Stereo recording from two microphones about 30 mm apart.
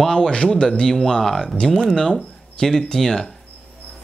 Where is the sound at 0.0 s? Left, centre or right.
Centre.